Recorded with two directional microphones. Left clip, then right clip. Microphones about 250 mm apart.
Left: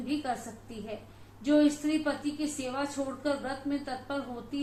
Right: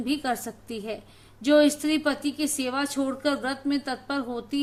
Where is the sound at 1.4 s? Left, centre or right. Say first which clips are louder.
Right 6 dB; right.